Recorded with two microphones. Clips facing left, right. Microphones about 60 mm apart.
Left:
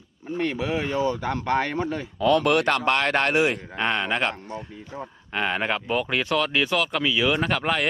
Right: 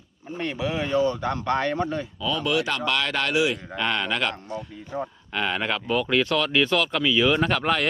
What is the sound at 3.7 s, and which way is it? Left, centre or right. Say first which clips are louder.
Speech: left 1 dB; left.